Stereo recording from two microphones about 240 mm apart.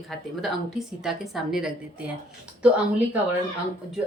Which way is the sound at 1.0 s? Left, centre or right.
Centre.